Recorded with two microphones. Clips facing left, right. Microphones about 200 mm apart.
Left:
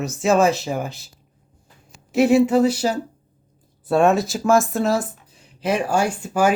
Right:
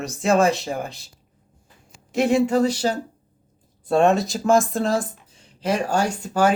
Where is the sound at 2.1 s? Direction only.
5° left (ahead or behind).